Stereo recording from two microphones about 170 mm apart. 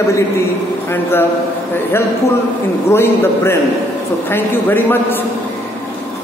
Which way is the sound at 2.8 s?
15° left (ahead or behind).